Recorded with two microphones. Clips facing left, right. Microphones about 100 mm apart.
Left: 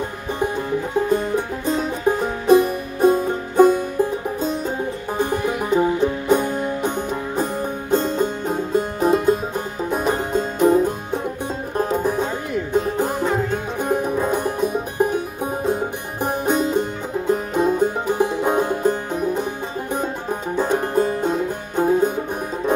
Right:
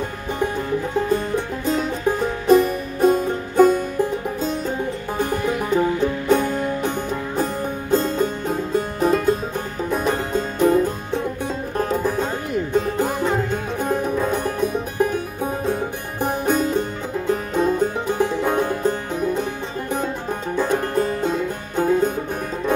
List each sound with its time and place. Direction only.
1.1 s music: 15° left (ahead or behind)
13.0 s music: centre (ahead or behind)
14.3 s music: 15° left (ahead or behind)
16.4 s music: 20° left (ahead or behind)